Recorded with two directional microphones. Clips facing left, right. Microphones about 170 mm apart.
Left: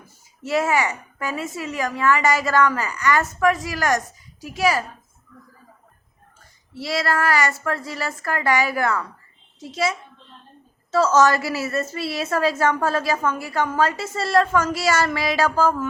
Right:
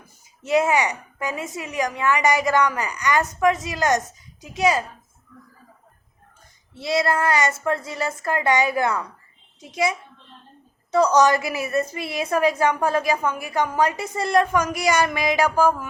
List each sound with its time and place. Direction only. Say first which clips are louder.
0.4 s a woman's voice: right 2 dB; 20° right (ahead or behind)
6.7 s a woman's voice: right 2 dB; 20° right (ahead or behind)